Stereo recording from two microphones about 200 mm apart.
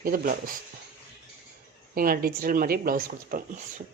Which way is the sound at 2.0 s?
45° right (ahead or behind).